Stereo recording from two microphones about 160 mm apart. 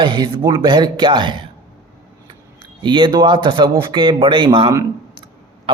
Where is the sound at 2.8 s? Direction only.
30° right (ahead or behind).